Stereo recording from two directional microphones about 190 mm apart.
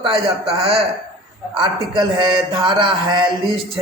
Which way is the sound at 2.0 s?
25° right (ahead or behind).